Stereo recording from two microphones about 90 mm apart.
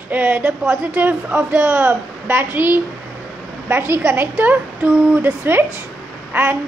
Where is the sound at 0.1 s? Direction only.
20° right (ahead or behind).